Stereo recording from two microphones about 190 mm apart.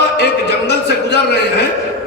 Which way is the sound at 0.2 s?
60° left (ahead or behind).